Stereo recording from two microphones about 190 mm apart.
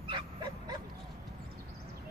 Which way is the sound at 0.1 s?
25° right (ahead or behind).